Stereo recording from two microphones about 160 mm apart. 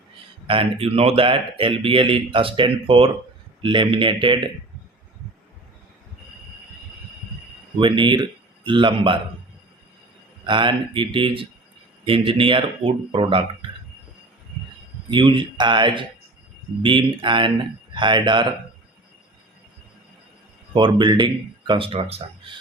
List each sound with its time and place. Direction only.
0.4 s speech: 35° right (ahead or behind)
7.8 s speech: 30° right (ahead or behind)
10.4 s speech: 30° right (ahead or behind)
15.1 s speech: 30° right (ahead or behind)
20.7 s speech: 30° right (ahead or behind)